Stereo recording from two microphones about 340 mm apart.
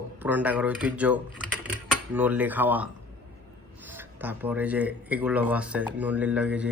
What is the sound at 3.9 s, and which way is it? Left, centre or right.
Speech, centre.